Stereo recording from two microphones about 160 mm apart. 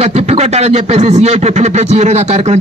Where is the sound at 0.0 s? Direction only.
40° right (ahead or behind).